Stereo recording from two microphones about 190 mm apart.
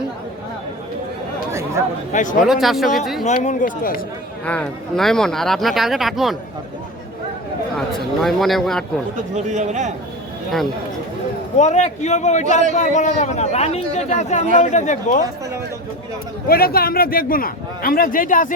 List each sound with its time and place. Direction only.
2.1 s speech: 45° left (ahead or behind)
2.4 s speech: centre (ahead or behind)
3.3 s speech: 45° left (ahead or behind)
4.4 s speech: 5° left (ahead or behind)
7.8 s speech: centre (ahead or behind)
9.3 s a man's voice: 40° right (ahead or behind)
11.5 s a man's voice: 35° left (ahead or behind)
16.5 s speech: 50° left (ahead or behind)